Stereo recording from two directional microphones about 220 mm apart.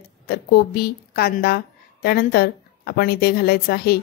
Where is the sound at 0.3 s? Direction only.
45° left (ahead or behind).